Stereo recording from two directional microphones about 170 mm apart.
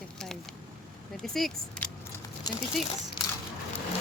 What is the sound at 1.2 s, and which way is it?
Speech, centre (ahead or behind).